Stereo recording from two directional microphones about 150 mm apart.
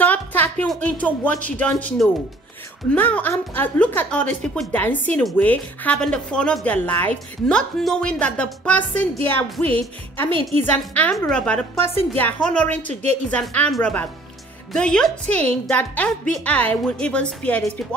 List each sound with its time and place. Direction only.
0.0 s music: 10° left (ahead or behind)
0.7 s speech: 10° left (ahead or behind)
12.8 s a woman's voice: 45° right (ahead or behind)
13.3 s speech: 5° left (ahead or behind)